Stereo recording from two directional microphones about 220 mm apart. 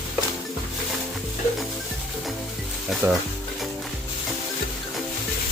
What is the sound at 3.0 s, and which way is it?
Stir, 10° right (ahead or behind).